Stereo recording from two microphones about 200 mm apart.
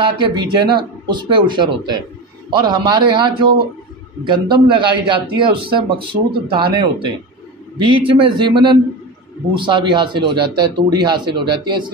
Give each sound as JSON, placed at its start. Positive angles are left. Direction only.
{"t": 0.0, "sound": "speech", "side_deg": -20}